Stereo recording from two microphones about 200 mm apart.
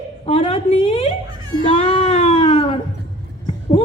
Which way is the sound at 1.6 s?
25° left (ahead or behind).